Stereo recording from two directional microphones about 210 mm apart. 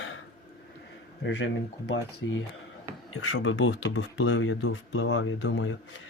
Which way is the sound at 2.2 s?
65° left (ahead or behind).